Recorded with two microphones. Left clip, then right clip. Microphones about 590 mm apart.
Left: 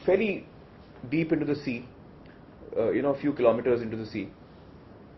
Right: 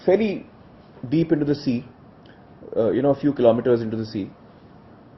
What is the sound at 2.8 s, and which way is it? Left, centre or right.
Speech, right.